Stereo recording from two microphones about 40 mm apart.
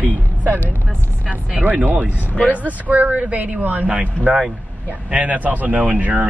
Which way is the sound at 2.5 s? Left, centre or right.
Right.